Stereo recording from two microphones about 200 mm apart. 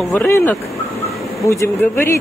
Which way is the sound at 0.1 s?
10° left (ahead or behind).